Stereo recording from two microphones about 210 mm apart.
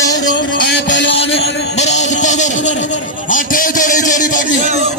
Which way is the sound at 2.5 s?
60° left (ahead or behind).